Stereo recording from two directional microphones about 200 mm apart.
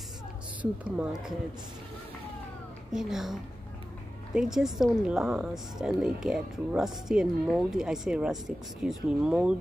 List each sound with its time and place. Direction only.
0.6 s speech: 5° right (ahead or behind)
2.9 s a woman's voice: centre (ahead or behind)